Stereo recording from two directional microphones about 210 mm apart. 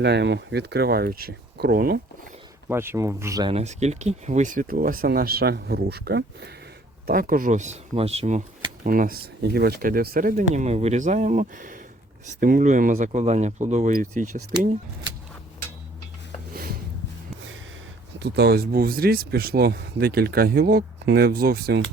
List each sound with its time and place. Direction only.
0.0 s speech: 55° right (ahead or behind)
2.6 s speech: 10° right (ahead or behind)
3.5 s speech: 30° right (ahead or behind)
18.2 s speech: 50° right (ahead or behind)